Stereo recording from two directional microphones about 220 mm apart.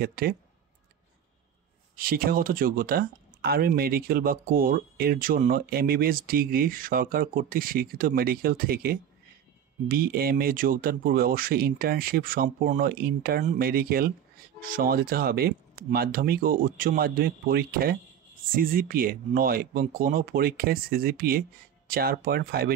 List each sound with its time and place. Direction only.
0.0 s speech: 45° right (ahead or behind)
2.0 s speech: 40° right (ahead or behind)